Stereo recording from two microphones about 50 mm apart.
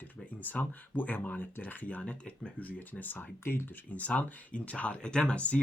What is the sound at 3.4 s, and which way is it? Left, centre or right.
Speech, left.